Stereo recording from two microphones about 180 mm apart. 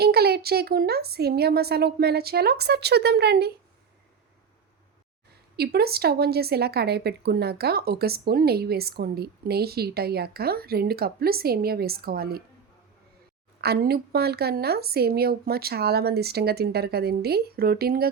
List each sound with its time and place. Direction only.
0.0 s speech: 60° right (ahead or behind)
5.5 s speech: 60° right (ahead or behind)
13.6 s speech: 60° right (ahead or behind)